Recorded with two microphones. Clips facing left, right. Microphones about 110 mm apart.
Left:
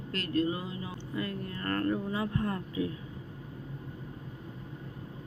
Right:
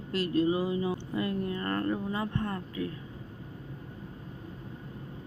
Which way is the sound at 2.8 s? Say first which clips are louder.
Left 2 dB; 15° left (ahead or behind).